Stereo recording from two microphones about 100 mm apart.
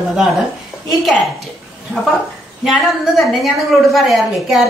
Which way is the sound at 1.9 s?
25° right (ahead or behind).